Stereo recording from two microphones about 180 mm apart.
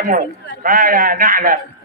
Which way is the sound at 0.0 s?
50° right (ahead or behind).